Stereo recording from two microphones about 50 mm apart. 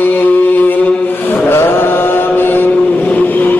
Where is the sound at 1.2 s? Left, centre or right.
Left.